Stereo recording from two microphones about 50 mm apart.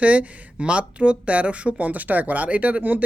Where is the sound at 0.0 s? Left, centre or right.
Right.